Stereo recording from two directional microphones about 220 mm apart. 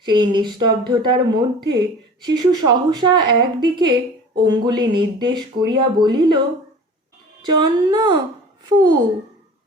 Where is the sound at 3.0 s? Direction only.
20° right (ahead or behind).